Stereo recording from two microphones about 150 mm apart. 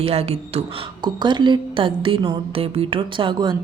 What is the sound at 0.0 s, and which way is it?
Speech, 40° right (ahead or behind).